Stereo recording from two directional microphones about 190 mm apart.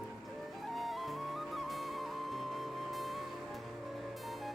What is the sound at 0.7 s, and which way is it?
Music, centre (ahead or behind).